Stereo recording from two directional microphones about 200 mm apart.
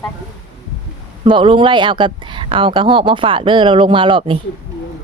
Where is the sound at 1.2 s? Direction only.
25° right (ahead or behind).